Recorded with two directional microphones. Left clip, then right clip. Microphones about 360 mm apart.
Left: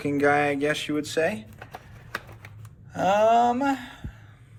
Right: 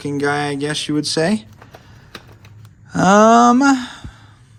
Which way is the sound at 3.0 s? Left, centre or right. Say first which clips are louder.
Right 9 dB; centre.